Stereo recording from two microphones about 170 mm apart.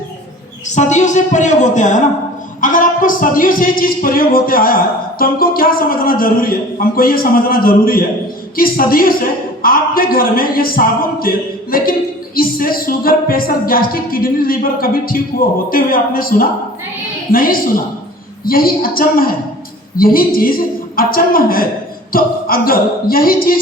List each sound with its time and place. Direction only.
0.8 s a woman's voice: 45° left (ahead or behind)